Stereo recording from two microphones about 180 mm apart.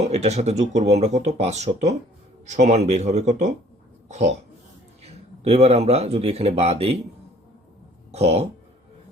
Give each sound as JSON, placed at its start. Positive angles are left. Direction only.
{"t": 0.0, "sound": "speech", "side_deg": -35}
{"t": 8.1, "sound": "speech", "side_deg": -35}